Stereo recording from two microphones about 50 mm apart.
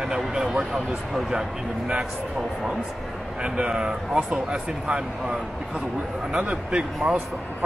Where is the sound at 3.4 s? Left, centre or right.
Centre.